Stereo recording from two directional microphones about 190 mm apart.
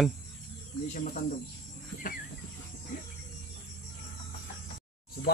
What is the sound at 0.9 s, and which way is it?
Speech, 40° left (ahead or behind).